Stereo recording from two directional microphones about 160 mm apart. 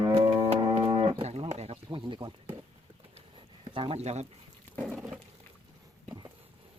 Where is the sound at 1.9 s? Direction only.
30° right (ahead or behind).